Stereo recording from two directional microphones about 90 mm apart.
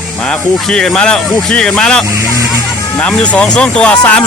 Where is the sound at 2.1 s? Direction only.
35° right (ahead or behind).